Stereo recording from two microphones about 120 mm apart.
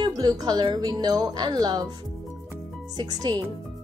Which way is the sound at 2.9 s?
35° right (ahead or behind).